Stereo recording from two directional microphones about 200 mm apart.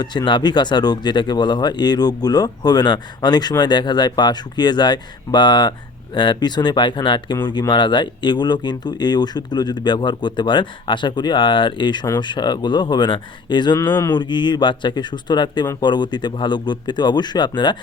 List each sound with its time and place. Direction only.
0.0 s speech: 20° left (ahead or behind)